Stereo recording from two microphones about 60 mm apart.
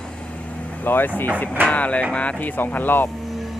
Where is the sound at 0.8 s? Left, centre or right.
Left.